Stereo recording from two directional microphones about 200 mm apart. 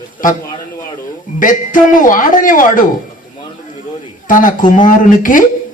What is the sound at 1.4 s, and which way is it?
A man's voice, 40° left (ahead or behind).